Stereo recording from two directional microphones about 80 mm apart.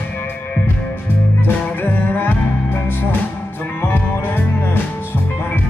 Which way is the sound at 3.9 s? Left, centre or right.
Left.